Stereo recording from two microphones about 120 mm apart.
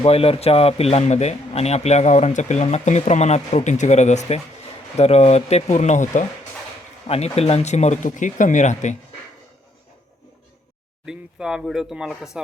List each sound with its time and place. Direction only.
0.0 s speech: 55° left (ahead or behind); by 4.4 s 70° left (ahead or behind)
4.9 s speech: 60° left (ahead or behind); by 6.2 s 80° left
7.1 s speech: 60° left (ahead or behind); by 9.0 s 85° left
11.0 s speech: 5° right (ahead or behind)